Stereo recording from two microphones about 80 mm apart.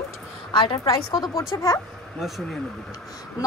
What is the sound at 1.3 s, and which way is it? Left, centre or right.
Speech, left.